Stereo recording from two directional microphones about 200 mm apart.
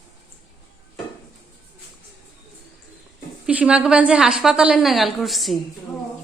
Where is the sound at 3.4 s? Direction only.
5° right (ahead or behind).